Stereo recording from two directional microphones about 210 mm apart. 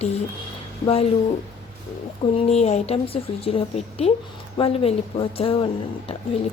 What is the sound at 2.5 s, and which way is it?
A woman's voice, 30° left (ahead or behind).